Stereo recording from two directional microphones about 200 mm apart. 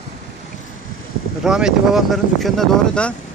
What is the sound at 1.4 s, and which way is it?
Speech, 5° right (ahead or behind).